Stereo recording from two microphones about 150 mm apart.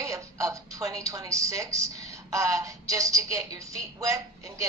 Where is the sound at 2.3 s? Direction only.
20° right (ahead or behind).